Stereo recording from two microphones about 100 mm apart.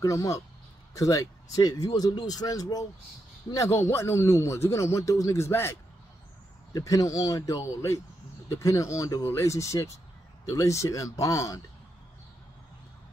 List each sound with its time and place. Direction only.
0.0 s a man's voice: 35° left (ahead or behind)
6.7 s speech: 35° left (ahead or behind)